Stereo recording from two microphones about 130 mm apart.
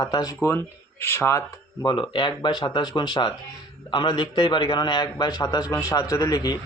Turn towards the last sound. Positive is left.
turn(degrees=30)  # may be behind; listen again after turning